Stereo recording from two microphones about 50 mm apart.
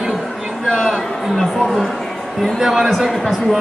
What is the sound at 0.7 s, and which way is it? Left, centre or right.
Speech, centre.